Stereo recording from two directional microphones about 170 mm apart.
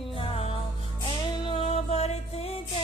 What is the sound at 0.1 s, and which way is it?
Music, 35° left (ahead or behind).